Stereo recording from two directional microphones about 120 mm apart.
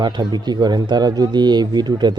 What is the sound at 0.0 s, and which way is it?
A man's voice, 40° right (ahead or behind).